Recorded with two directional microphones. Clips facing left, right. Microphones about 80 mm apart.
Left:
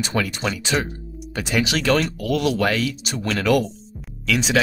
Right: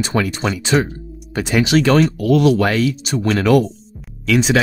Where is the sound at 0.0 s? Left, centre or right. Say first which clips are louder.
Right 4 dB; right.